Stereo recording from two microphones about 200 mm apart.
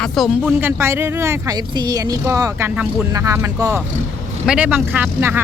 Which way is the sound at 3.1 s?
15° right (ahead or behind).